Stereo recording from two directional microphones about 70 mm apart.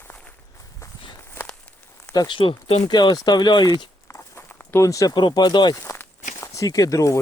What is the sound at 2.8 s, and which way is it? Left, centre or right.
Speech, left.